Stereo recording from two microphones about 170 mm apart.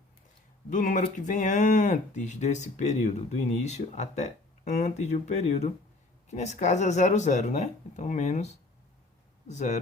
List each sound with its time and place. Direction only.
0.7 s speech: 50° left (ahead or behind)
9.5 s speech: 40° left (ahead or behind)